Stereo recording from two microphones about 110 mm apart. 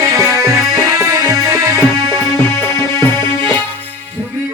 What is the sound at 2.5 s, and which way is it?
Music, 20° left (ahead or behind).